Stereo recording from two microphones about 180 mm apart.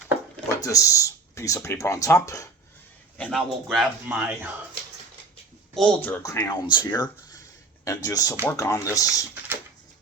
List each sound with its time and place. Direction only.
0.5 s speech: 20° left (ahead or behind)
3.2 s speech: 5° left (ahead or behind)
5.7 s speech: 5° left (ahead or behind)